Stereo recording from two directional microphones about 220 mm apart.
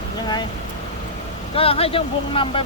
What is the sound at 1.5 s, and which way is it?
Speech, 25° left (ahead or behind).